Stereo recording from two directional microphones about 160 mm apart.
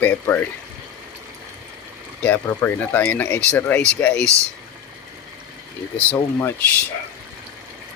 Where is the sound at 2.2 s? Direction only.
15° left (ahead or behind).